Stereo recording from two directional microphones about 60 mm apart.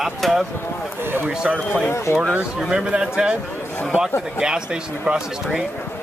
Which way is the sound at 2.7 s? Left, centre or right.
Centre.